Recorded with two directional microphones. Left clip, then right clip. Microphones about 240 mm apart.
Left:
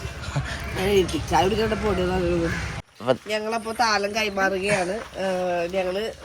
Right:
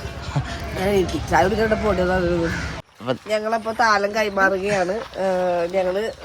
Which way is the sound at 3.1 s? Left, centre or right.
Centre.